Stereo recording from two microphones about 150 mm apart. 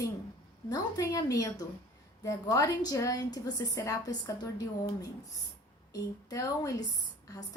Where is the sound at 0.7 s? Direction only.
25° left (ahead or behind).